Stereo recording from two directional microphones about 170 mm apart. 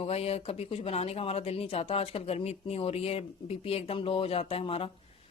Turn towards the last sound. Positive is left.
turn(degrees=35)  # may be behind; listen again after turning